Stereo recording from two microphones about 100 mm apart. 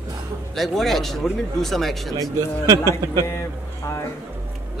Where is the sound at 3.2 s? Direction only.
30° left (ahead or behind).